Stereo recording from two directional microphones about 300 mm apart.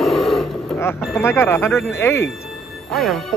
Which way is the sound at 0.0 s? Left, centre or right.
Centre.